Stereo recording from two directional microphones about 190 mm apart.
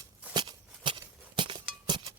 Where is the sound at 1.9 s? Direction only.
25° right (ahead or behind).